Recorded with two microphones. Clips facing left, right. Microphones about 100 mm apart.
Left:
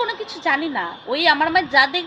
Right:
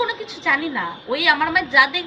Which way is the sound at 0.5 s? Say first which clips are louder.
Right 2 dB; 50° left (ahead or behind).